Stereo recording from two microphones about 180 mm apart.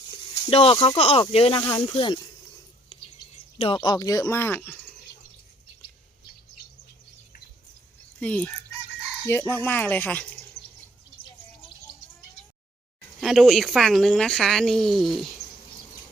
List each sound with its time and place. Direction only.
0.5 s speech: 30° left (ahead or behind)
2.9 s a sound: 35° left (ahead or behind)
3.6 s speech: 25° left (ahead or behind); by 4.8 s 10° left (ahead or behind)
8.2 s speech: 10° left (ahead or behind)
13.1 s speech: centre (ahead or behind)